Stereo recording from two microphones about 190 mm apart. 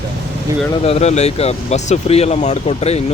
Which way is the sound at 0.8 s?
35° left (ahead or behind).